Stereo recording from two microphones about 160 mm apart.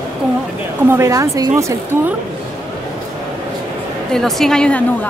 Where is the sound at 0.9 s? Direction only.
20° right (ahead or behind).